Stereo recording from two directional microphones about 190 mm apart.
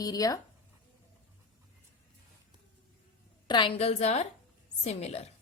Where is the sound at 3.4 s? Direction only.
25° left (ahead or behind).